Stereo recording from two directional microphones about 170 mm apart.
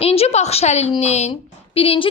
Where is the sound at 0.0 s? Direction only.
35° left (ahead or behind).